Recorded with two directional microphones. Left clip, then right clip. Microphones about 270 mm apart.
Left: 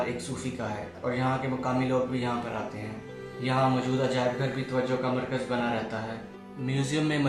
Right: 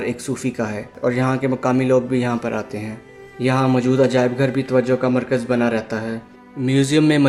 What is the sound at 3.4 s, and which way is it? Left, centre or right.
A man's voice, right.